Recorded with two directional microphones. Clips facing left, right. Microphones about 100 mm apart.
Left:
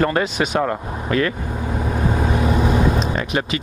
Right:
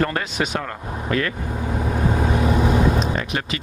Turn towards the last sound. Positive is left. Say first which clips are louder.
# left 4 dB
turn(degrees=15)  # may be behind; listen again after turning